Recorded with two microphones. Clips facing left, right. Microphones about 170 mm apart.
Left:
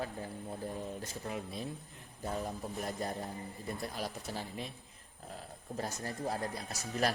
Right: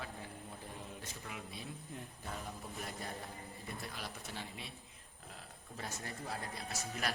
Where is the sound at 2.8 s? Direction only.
40° left (ahead or behind).